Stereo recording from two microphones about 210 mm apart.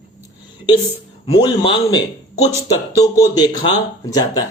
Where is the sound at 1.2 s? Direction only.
20° left (ahead or behind).